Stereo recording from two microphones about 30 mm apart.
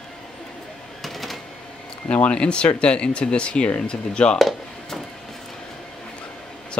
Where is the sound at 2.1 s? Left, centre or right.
Left.